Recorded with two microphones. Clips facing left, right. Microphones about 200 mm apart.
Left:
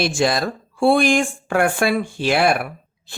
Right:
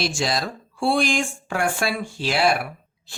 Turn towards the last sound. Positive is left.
turn(degrees=55)  # may be behind; listen again after turning